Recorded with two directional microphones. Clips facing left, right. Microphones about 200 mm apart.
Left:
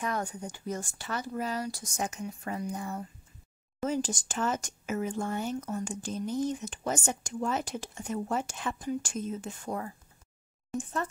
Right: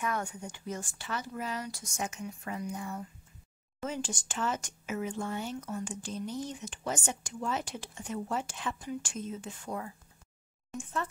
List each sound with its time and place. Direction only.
0.0 s speech: 35° left (ahead or behind)